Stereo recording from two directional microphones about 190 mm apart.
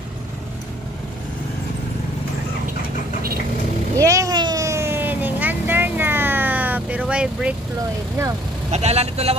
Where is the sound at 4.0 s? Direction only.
15° right (ahead or behind).